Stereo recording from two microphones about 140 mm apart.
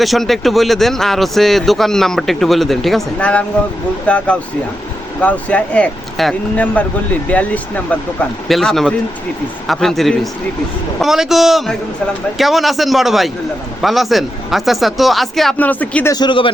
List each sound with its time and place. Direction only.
0.0 s speech: centre (ahead or behind)
15.5 s speech: 10° left (ahead or behind)
16.1 s speech: 35° left (ahead or behind)